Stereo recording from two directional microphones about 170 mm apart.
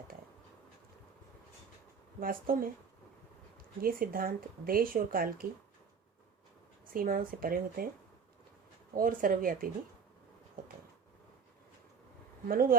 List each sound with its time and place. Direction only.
2.2 s speech: 60° right (ahead or behind)
3.8 s speech: 60° right (ahead or behind)
6.9 s speech: 55° right (ahead or behind)
9.0 s speech: 55° right (ahead or behind)
12.5 s speech: 60° right (ahead or behind)